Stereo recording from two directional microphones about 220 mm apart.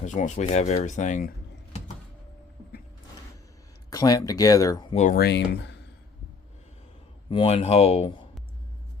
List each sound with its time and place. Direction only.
0.0 s speech: 30° left (ahead or behind)
3.8 s speech: 15° left (ahead or behind)
4.9 s speech: 40° left (ahead or behind)
7.3 s speech: 25° left (ahead or behind)